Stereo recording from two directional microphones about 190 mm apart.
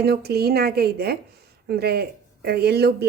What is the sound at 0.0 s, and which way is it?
Speech, 55° right (ahead or behind).